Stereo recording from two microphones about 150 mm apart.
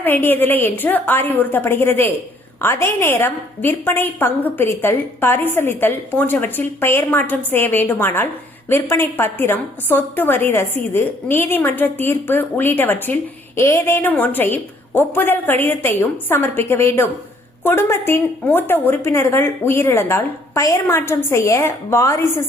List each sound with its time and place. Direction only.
0.0 s a woman's voice: 15° left (ahead or behind)